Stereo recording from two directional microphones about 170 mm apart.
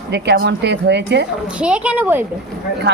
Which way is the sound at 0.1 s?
80° right.